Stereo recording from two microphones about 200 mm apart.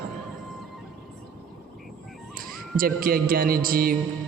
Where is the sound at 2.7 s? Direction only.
45° right (ahead or behind).